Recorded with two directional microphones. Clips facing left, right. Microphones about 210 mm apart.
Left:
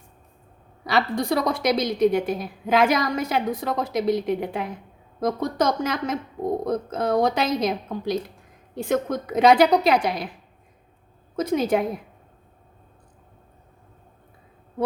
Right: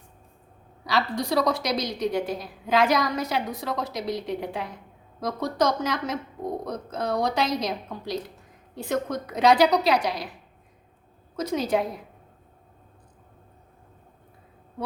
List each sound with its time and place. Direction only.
0.9 s a woman's voice: 55° left (ahead or behind)
11.3 s a woman's voice: 50° left (ahead or behind)